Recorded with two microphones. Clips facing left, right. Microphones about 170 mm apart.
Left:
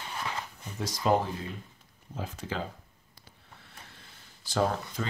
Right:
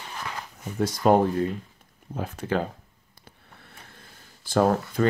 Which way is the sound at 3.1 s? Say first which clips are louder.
Right 3 dB; 55° right (ahead or behind).